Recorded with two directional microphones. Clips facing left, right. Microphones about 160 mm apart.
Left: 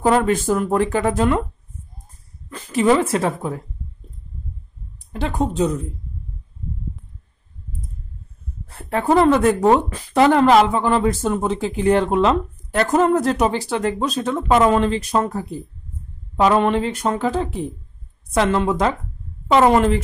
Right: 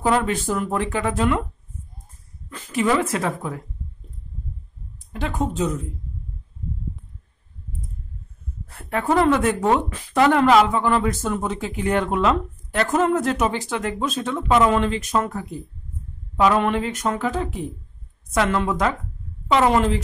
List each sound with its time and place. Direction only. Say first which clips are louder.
0.0 s speech: left 4 dB; 45° left (ahead or behind)
2.5 s a woman's voice: left 4 dB; 35° left (ahead or behind)
5.1 s a woman's voice: left 3 dB; 35° left (ahead or behind)
8.6 s a woman's voice: left 3 dB; 30° left (ahead or behind)
19.4 s a woman's voice: left 4 dB; 45° left (ahead or behind)